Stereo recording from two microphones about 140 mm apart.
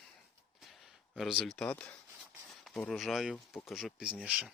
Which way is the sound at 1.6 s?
10° left (ahead or behind).